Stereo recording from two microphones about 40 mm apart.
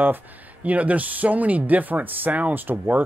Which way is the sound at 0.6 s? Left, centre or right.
Right.